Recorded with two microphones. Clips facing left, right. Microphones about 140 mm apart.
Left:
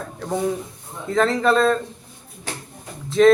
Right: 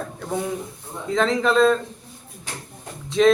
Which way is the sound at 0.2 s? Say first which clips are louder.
Left 2 dB; centre (ahead or behind).